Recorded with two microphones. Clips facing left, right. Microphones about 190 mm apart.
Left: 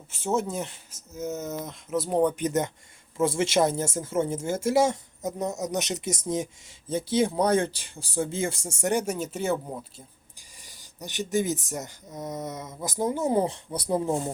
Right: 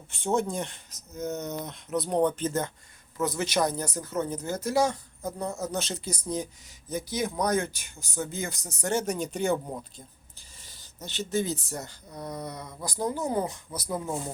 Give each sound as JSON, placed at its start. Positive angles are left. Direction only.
{"t": 0.1, "sound": "speech", "side_deg": 5}
{"t": 10.6, "sound": "speech", "side_deg": 15}